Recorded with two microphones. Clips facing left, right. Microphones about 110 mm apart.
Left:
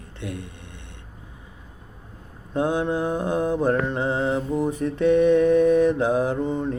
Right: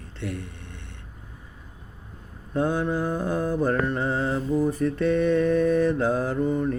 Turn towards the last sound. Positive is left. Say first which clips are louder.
# even
turn(degrees=20)  # may be behind; listen again after turning